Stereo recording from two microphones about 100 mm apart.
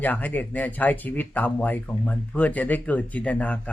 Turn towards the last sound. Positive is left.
turn(degrees=15)  # may be behind; listen again after turning